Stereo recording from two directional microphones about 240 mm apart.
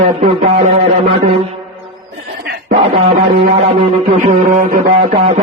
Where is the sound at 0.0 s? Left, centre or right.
Right.